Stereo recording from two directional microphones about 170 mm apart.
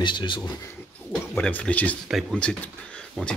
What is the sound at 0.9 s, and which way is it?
Speech, 5° left (ahead or behind).